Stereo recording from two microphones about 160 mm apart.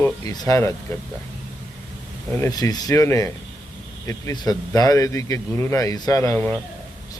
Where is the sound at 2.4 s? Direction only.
20° left (ahead or behind).